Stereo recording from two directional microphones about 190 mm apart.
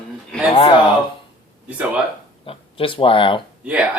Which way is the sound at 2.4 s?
30° left (ahead or behind).